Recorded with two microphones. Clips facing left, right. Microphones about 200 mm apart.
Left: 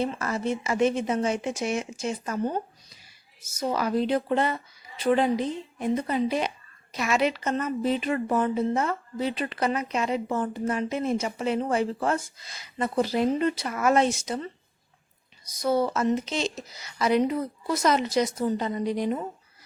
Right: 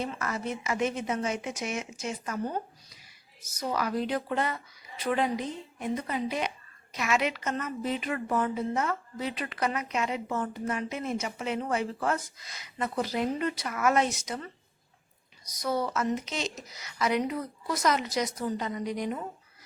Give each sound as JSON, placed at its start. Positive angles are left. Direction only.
{"t": 0.0, "sound": "a woman's voice", "side_deg": 30}